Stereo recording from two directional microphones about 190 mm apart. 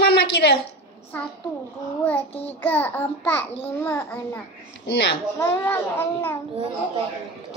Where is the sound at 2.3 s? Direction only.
30° left (ahead or behind).